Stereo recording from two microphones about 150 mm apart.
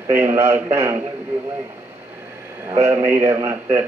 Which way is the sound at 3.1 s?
20° right (ahead or behind).